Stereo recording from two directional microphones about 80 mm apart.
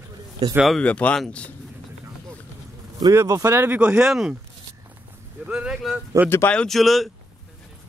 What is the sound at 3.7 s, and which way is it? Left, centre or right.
Speech, centre.